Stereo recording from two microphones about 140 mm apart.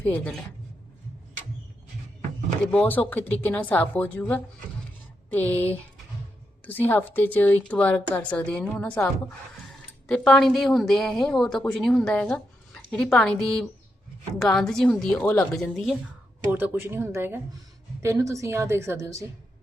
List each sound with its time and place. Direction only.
0.0 s a woman's voice: 10° left (ahead or behind)
2.7 s a woman's voice: 10° left (ahead or behind)
10.1 s a woman's voice: 5° left (ahead or behind)
16.5 s a woman's voice: 15° right (ahead or behind)